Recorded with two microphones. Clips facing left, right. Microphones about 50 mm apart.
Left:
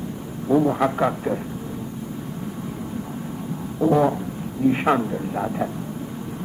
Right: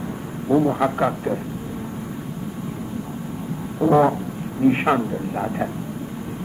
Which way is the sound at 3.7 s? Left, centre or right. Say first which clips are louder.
Right 2 dB; centre.